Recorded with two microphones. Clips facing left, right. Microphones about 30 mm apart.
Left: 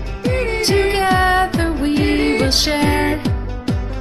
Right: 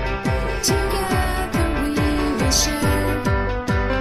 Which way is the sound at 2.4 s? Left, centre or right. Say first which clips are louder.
Left 4 dB; left.